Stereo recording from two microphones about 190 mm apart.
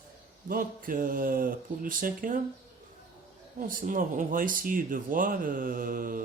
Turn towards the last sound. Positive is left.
turn(degrees=-45)  # may be behind; listen again after turning